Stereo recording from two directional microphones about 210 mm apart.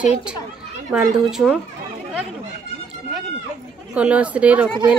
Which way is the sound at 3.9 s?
5° right (ahead or behind).